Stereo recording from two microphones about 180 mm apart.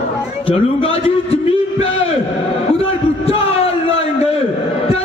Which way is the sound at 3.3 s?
35° left (ahead or behind).